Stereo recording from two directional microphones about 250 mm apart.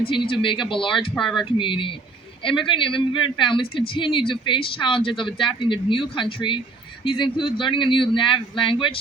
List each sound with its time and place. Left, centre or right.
0.1 s speech: left
1.1 s speech: centre
1.5 s speech: centre